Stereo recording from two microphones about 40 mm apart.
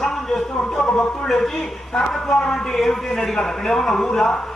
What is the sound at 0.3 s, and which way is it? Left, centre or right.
Music, centre.